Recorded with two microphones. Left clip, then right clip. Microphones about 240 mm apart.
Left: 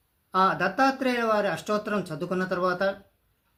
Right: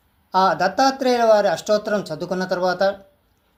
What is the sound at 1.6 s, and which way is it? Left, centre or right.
Speech, left.